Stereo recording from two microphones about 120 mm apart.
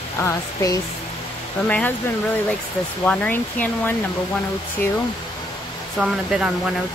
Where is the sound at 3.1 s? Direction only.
15° left (ahead or behind).